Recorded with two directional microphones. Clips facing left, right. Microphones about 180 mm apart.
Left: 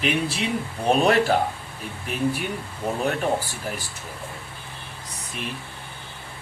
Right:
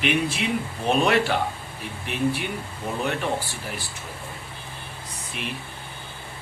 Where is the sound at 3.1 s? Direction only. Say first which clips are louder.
Left 3 dB; 40° left (ahead or behind).